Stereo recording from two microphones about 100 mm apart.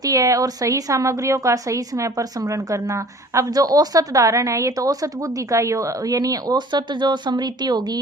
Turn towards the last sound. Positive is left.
turn(degrees=-45)  # may be behind; listen again after turning